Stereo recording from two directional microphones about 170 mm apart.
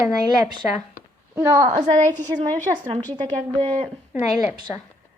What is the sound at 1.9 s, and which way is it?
Speech, 45° right (ahead or behind).